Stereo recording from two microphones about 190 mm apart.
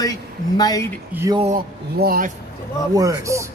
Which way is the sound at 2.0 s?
50° right (ahead or behind).